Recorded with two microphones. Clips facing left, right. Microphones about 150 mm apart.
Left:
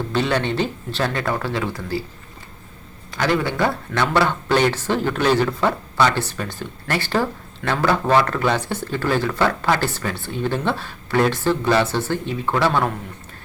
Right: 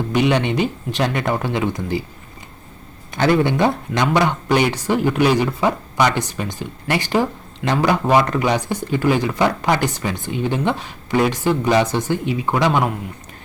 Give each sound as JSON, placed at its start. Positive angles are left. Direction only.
{"t": 0.1, "sound": "speech", "side_deg": -15}
{"t": 3.1, "sound": "speech", "side_deg": -20}